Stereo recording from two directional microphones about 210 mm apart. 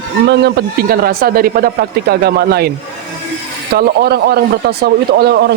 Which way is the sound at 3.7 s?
50° right (ahead or behind).